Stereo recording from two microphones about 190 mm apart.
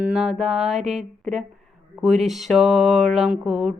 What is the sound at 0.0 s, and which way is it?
Speech, 5° right (ahead or behind).